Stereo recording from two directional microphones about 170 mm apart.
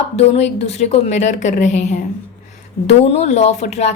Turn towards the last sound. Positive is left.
turn(degrees=40)  # may be behind; listen again after turning